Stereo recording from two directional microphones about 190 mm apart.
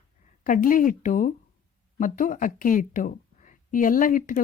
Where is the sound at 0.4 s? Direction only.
45° left (ahead or behind).